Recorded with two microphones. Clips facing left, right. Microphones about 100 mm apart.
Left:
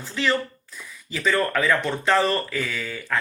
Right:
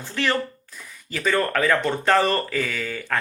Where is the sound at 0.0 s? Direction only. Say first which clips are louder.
Even; 55° right (ahead or behind).